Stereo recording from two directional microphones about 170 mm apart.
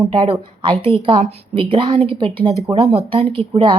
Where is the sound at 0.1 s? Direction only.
30° right (ahead or behind).